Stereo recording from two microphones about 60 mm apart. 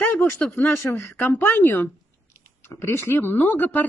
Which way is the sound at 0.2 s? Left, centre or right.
Left.